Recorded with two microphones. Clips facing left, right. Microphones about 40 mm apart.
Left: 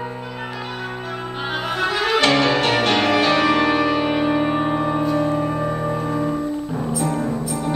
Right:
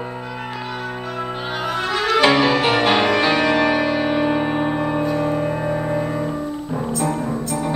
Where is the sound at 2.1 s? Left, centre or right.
Centre.